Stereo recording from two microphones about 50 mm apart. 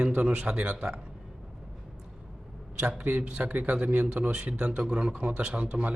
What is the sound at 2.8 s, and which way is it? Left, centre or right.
A man's voice, right.